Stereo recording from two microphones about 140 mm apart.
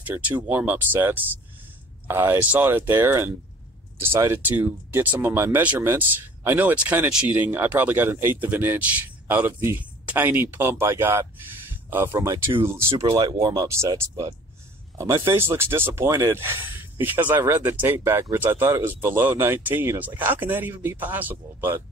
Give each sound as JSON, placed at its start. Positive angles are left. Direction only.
{"t": 0.0, "sound": "speech", "side_deg": -15}
{"t": 13.0, "sound": "speech", "side_deg": -30}